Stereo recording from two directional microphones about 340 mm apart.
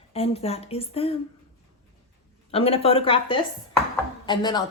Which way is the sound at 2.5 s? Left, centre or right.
Centre.